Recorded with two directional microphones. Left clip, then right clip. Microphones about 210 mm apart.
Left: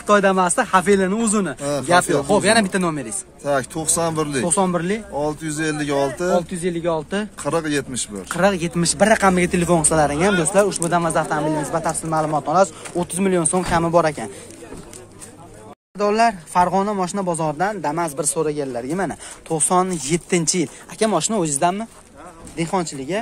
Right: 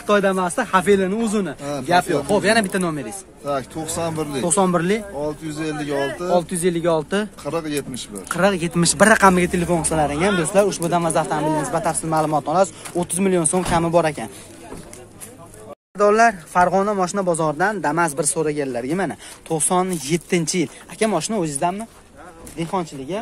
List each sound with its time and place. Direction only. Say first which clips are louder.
0.0 s speech: left 2 dB; 10° left (ahead or behind)
1.6 s speech: left 4 dB; 55° left (ahead or behind)
1.9 s speech: left 1 dB; 10° left (ahead or behind)
3.4 s speech: left 3 dB; 55° left (ahead or behind)
4.4 s speech: right 4 dB; 10° right (ahead or behind)
5.2 s speech: left 3 dB; 55° left (ahead or behind)
6.3 s speech: right 2 dB; 15° right (ahead or behind)
7.4 s speech: left 3 dB; 55° left (ahead or behind)
8.3 s speech: even; centre (ahead or behind)
8.8 s speech: right 2 dB; 15° right (ahead or behind)
9.3 s speech: left 1 dB; centre (ahead or behind)
16.0 s speech: right 3 dB; 5° right (ahead or behind)
18.3 s speech: even; 5° right (ahead or behind); by 23.2 s 15° left (ahead or behind)